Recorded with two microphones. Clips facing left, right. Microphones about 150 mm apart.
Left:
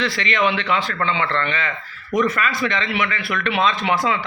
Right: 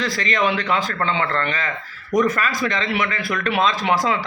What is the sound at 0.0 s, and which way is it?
Speech, 40° right (ahead or behind).